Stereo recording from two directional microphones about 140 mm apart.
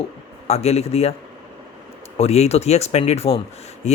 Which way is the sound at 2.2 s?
50° left (ahead or behind).